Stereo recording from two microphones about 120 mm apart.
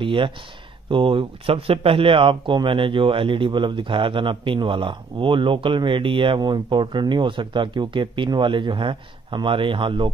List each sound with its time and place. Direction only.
0.0 s speech: 45° right (ahead or behind)